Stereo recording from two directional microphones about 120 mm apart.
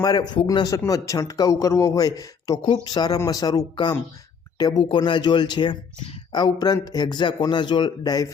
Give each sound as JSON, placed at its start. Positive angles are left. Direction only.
{"t": 0.0, "sound": "a man's voice", "side_deg": 35}